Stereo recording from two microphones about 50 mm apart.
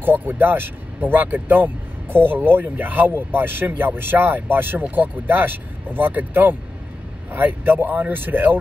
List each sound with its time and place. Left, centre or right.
0.0 s speech: right